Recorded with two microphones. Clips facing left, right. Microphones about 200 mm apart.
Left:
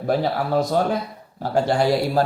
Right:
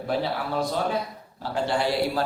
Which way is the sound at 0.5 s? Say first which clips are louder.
Left 6 dB; 45° left (ahead or behind).